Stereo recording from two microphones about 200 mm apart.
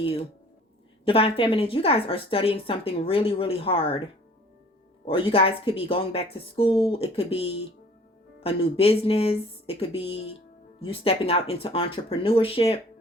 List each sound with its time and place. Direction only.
1.0 s speech: 30° left (ahead or behind)
5.0 s speech: 25° left (ahead or behind)